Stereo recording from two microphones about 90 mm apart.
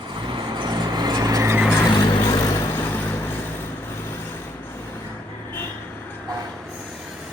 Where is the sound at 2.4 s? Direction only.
40° left (ahead or behind).